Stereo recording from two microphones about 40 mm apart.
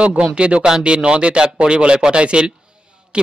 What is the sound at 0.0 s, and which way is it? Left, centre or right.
A man's voice, right.